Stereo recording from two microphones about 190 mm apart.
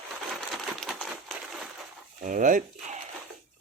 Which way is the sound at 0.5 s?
Centre (ahead or behind).